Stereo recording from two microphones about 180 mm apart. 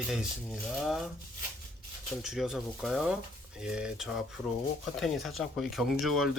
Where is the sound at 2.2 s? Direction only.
5° right (ahead or behind).